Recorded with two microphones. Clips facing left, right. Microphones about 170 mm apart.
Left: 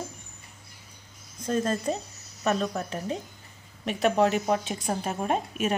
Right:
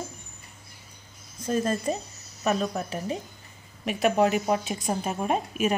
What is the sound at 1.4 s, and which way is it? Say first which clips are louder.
Speech: right 1 dB; 10° right (ahead or behind).